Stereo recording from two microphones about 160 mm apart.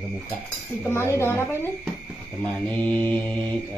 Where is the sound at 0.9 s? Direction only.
15° left (ahead or behind).